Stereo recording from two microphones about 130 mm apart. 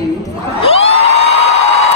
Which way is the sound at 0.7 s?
55° left (ahead or behind).